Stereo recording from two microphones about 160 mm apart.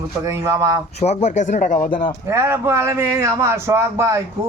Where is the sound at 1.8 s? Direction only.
60° left (ahead or behind).